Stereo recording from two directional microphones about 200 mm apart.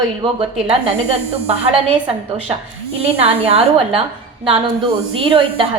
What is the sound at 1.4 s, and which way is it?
Speech, 30° right (ahead or behind).